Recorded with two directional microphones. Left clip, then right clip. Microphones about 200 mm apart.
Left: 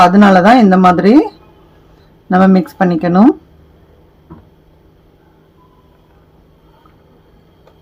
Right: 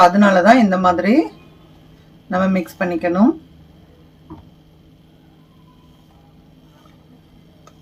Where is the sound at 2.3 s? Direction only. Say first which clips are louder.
Left 8 dB; 50° left (ahead or behind).